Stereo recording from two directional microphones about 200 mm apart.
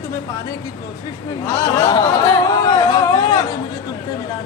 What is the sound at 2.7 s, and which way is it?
Music, 20° left (ahead or behind).